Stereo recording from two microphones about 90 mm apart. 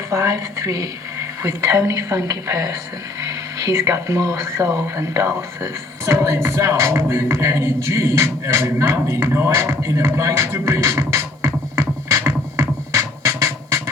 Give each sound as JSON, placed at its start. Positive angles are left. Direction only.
{"t": 0.1, "sound": "speech", "side_deg": -35}
{"t": 12.1, "sound": "music", "side_deg": -35}